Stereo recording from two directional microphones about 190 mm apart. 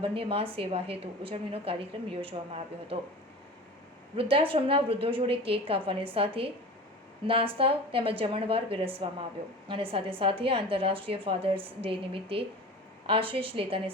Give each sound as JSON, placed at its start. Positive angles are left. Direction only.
{"t": 0.0, "sound": "a woman's voice", "side_deg": -30}
{"t": 4.2, "sound": "a woman's voice", "side_deg": -30}